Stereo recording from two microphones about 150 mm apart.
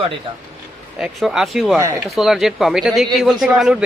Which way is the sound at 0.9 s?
5° right (ahead or behind).